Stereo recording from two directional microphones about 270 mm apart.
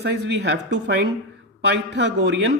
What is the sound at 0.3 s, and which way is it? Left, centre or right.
Speech, right.